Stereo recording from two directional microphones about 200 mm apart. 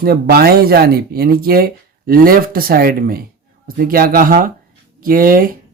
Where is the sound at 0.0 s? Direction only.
50° right (ahead or behind).